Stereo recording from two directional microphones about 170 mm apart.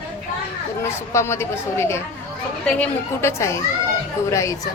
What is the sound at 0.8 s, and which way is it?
A woman's voice, 15° left (ahead or behind).